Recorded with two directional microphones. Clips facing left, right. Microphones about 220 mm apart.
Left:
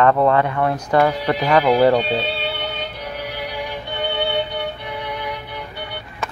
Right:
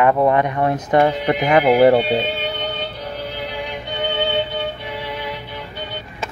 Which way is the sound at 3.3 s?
20° right (ahead or behind).